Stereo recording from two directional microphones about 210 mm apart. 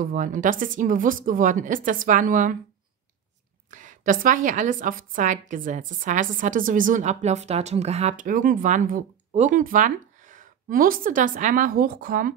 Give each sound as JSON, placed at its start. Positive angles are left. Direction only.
{"t": 0.0, "sound": "a woman's voice", "side_deg": -40}
{"t": 3.7, "sound": "a woman's voice", "side_deg": -35}